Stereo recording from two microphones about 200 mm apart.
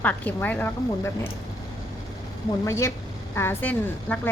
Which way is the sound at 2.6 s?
15° left (ahead or behind).